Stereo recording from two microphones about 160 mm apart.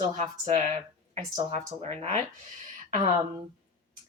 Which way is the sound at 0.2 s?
45° right (ahead or behind).